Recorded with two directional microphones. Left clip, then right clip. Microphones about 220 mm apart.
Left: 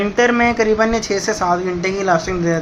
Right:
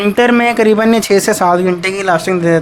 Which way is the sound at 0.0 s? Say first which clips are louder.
Right 4 dB; 50° right (ahead or behind).